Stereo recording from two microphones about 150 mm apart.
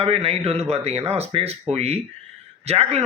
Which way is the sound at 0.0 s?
40° right (ahead or behind).